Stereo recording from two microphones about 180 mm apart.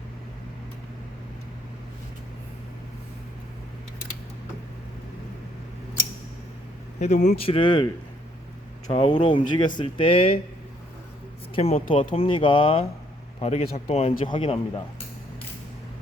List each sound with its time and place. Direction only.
7.0 s speech: 40° left (ahead or behind)
8.9 s speech: 25° left (ahead or behind)
11.5 s speech: 30° left (ahead or behind)